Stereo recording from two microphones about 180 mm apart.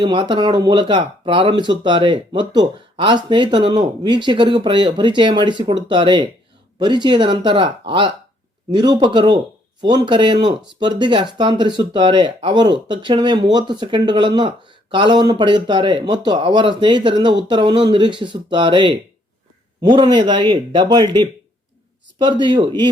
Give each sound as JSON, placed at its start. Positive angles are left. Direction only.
{"t": 0.0, "sound": "speech", "side_deg": -25}